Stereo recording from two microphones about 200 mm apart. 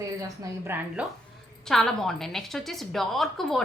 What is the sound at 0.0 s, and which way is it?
Speech, 15° right (ahead or behind).